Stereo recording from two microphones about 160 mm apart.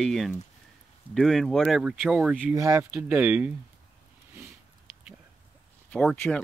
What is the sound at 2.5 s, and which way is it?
Speech, 20° right (ahead or behind).